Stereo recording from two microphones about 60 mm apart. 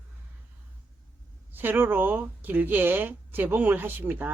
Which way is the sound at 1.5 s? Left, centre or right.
Right.